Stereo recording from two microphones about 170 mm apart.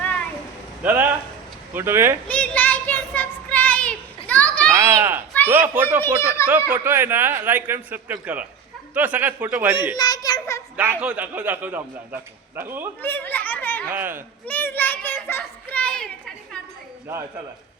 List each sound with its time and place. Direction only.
0.0 s a sound: 5° left (ahead or behind)
0.8 s a man's voice: 10° right (ahead or behind)
2.2 s child singing: 5° left (ahead or behind)
4.7 s a man's voice: 20° right (ahead or behind)
9.9 s a sound: 25° left (ahead or behind)
11.0 s a man's voice: 5° right (ahead or behind)
13.0 s children playing: 10° left (ahead or behind)
13.9 s a man's voice: 10° right (ahead or behind)
14.4 s a child's voice: 10° left (ahead or behind)